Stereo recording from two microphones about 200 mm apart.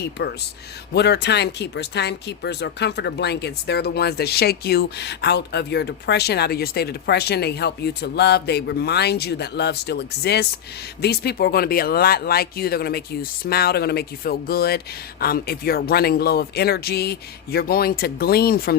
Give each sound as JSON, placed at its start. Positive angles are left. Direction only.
{"t": 0.2, "sound": "speech", "side_deg": 55}